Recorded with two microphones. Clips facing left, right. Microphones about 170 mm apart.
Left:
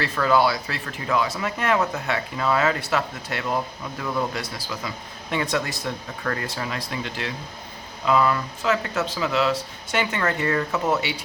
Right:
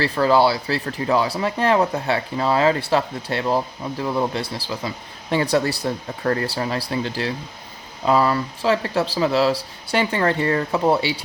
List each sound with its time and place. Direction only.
0.0 s speech: 30° right (ahead or behind)